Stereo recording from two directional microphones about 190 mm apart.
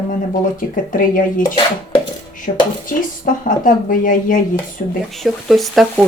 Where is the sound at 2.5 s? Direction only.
40° left (ahead or behind).